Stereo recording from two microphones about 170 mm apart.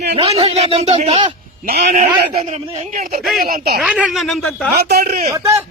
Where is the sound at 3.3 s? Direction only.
60° right (ahead or behind).